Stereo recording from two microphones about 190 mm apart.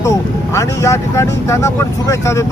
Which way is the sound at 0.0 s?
15° left (ahead or behind).